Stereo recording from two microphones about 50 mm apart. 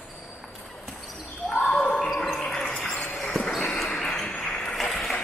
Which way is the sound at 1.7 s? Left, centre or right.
Centre.